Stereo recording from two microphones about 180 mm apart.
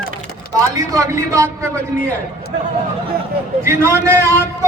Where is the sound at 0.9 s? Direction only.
20° right (ahead or behind).